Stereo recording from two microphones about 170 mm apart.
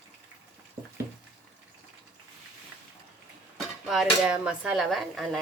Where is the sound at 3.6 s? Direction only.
Centre (ahead or behind).